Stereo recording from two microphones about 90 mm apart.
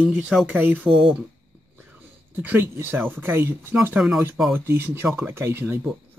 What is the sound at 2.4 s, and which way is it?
Speech, 25° right (ahead or behind).